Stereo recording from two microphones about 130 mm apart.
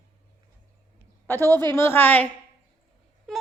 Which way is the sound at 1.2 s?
15° left (ahead or behind).